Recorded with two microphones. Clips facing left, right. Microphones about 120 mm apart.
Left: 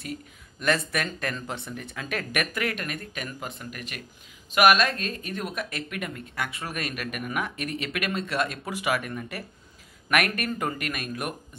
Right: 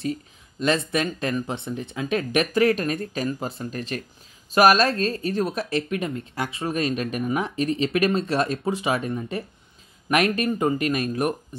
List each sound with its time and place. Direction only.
0.6 s speech: 20° right (ahead or behind)